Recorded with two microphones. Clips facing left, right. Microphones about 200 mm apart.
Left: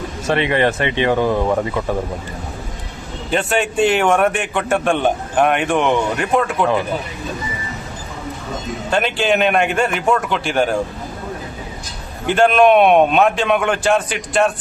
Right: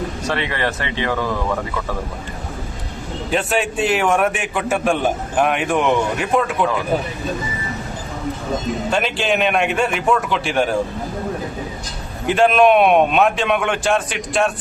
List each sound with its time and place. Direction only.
0.3 s speech: 20° left (ahead or behind)
3.2 s a man's voice: centre (ahead or behind)
8.9 s a man's voice: centre (ahead or behind)
12.2 s a man's voice: centre (ahead or behind)